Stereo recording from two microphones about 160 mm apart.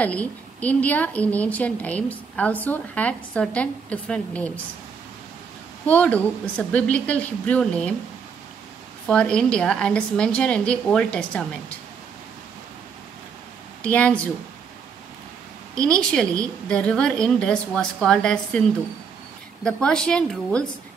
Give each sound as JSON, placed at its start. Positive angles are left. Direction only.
{"t": 0.0, "sound": "a woman's voice", "side_deg": 10}
{"t": 5.9, "sound": "a woman's voice", "side_deg": 10}
{"t": 9.0, "sound": "a woman's voice", "side_deg": 5}
{"t": 13.8, "sound": "a woman's voice", "side_deg": 10}
{"t": 15.7, "sound": "a woman's voice", "side_deg": 5}
{"t": 19.6, "sound": "a woman's voice", "side_deg": 5}